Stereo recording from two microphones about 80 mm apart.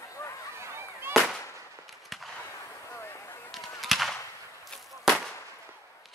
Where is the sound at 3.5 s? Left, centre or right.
Centre.